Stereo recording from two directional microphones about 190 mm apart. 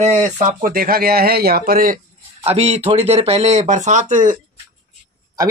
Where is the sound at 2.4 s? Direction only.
30° right (ahead or behind).